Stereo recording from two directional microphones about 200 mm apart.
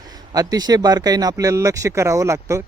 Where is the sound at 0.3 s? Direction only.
20° right (ahead or behind).